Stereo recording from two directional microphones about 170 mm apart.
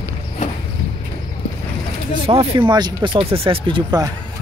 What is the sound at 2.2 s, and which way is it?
Speech, 30° right (ahead or behind).